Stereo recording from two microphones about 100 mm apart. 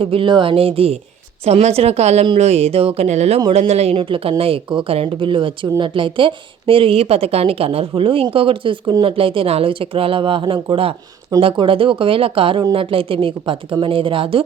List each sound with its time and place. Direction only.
0.0 s a woman's voice: 65° right (ahead or behind)
1.5 s speech: 90° right
3.9 s a woman's voice: 60° right (ahead or behind)